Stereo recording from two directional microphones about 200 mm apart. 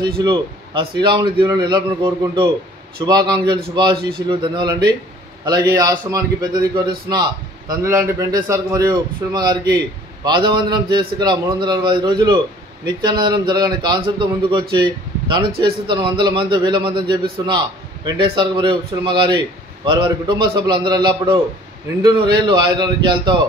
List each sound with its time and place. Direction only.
0.0 s a man's voice: 25° right (ahead or behind)